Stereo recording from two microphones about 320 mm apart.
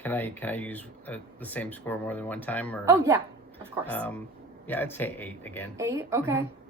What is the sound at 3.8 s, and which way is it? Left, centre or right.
Speech, centre.